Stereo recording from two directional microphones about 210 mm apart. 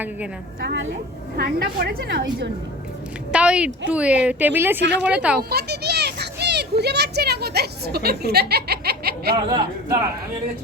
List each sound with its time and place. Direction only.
0.6 s a woman's voice: 55° right (ahead or behind)
3.3 s a woman's voice: 5° right (ahead or behind)
4.8 s a woman's voice: 55° right (ahead or behind)
5.1 s speech: 5° right (ahead or behind)
5.4 s a child's voice: 50° right (ahead or behind)